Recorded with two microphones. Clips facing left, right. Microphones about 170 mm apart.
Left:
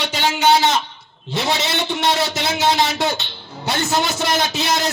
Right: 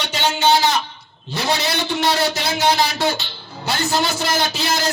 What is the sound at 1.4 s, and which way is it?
A man's voice, 20° left (ahead or behind).